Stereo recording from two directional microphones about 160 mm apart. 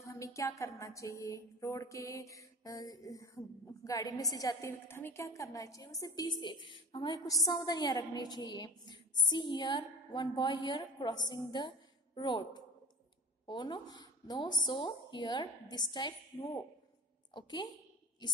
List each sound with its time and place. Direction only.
0.0 s a woman's voice: 20° left (ahead or behind)